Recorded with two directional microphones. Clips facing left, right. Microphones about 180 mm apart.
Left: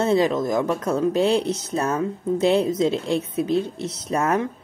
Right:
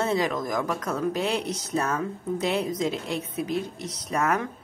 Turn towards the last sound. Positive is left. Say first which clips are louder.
# left 4 dB
turn(degrees=25)  # may be behind; listen again after turning